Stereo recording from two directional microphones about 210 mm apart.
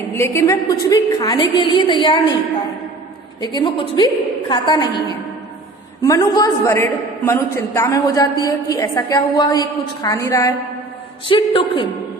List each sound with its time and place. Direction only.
0.1 s a woman's voice: 10° left (ahead or behind)
3.6 s a woman's voice: 20° left (ahead or behind)